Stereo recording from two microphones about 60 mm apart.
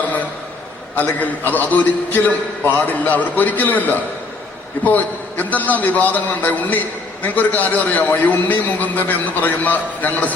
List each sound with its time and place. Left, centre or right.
1.2 s a man's voice: left